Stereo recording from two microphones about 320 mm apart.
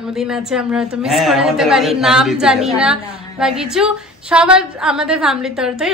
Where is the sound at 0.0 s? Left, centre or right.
Centre.